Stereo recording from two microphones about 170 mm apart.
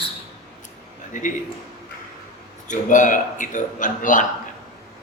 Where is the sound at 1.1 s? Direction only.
50° left (ahead or behind).